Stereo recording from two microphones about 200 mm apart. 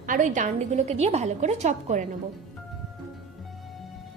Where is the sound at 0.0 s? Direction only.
40° right (ahead or behind).